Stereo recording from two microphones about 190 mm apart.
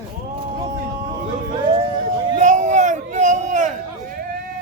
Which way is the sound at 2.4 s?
40° right (ahead or behind).